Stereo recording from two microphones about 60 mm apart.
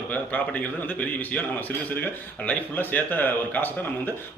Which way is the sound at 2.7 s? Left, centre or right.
Left.